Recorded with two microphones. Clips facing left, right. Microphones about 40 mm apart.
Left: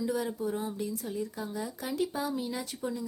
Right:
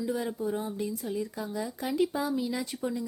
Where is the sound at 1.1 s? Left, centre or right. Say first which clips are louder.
Right 2 dB; right.